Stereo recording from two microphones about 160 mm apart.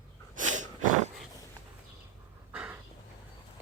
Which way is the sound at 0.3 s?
50° right (ahead or behind).